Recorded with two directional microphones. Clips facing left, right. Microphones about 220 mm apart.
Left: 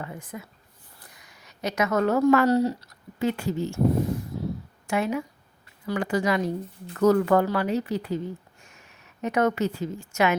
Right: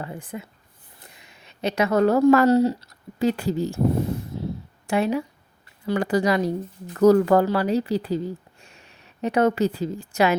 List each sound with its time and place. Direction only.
0.0 s a woman's voice: 30° right (ahead or behind)
4.9 s speech: 30° right (ahead or behind)